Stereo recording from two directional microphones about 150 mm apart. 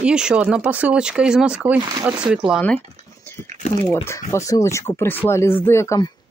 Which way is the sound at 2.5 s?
5° left (ahead or behind).